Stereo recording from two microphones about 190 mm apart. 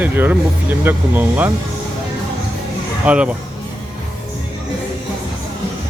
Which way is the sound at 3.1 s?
5° right (ahead or behind).